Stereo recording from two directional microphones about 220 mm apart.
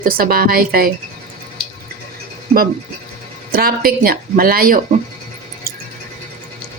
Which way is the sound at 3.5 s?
40° right (ahead or behind).